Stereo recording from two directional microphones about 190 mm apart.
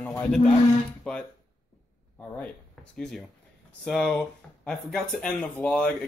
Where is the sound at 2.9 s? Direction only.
Centre (ahead or behind).